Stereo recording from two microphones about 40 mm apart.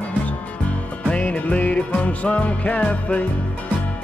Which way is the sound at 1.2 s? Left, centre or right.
Left.